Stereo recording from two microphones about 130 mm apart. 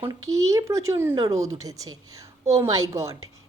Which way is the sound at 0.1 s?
25° right (ahead or behind).